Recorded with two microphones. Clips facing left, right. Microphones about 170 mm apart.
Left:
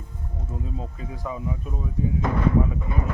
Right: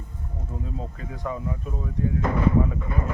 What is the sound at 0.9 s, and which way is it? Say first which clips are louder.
Speech: right 1 dB; 5° left (ahead or behind).